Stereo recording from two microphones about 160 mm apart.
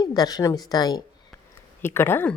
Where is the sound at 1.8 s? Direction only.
15° left (ahead or behind).